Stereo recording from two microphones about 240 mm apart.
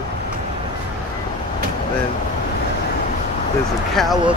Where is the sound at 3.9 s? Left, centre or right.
Centre.